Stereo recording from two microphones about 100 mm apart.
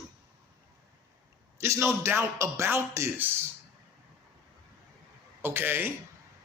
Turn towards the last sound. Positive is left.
turn(degrees=-20)  # may be behind; listen again after turning